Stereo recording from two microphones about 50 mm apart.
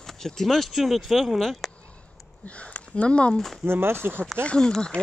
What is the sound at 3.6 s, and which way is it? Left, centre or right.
Speech, right.